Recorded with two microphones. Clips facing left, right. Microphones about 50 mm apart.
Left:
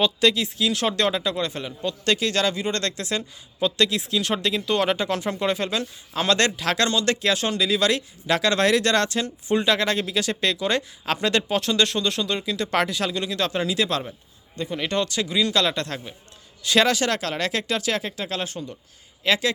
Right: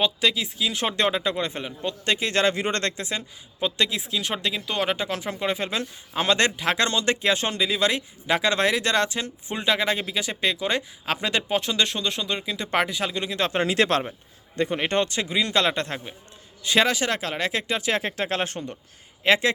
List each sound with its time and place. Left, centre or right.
0.0 s speech: centre; by 2.9 s right
2.9 s speech: centre
13.6 s speech: right; by 17.9 s centre
17.9 s speech: right
19.2 s speech: right